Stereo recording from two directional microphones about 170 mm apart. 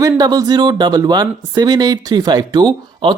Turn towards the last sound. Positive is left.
turn(degrees=-25)  # may be behind; listen again after turning